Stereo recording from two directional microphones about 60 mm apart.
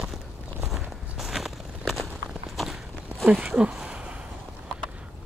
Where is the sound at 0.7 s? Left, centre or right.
Centre.